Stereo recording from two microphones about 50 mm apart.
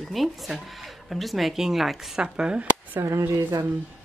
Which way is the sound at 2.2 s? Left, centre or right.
Centre.